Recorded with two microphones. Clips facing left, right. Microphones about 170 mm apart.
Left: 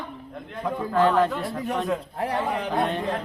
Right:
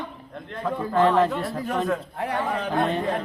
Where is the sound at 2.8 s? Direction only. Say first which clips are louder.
Right 2 dB; centre (ahead or behind).